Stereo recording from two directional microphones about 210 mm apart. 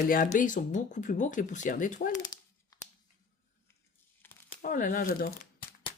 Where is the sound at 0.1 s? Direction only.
40° left (ahead or behind).